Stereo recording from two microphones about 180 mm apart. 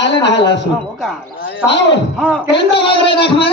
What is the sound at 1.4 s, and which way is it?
A man's voice, 80° left.